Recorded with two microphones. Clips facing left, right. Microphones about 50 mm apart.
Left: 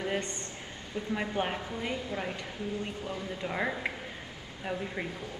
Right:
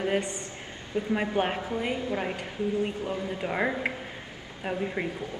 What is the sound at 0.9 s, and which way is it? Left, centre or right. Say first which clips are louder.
A woman's voice: right 5 dB; right.